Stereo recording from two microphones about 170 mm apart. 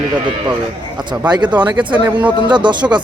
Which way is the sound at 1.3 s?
25° right (ahead or behind).